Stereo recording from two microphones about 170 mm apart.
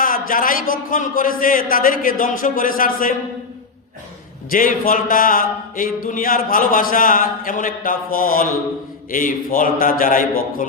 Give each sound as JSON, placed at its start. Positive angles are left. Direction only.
{"t": 0.0, "sound": "speech", "side_deg": 55}
{"t": 4.5, "sound": "a man's voice", "side_deg": 55}